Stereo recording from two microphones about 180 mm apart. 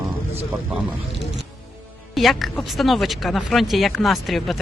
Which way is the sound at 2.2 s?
Centre (ahead or behind).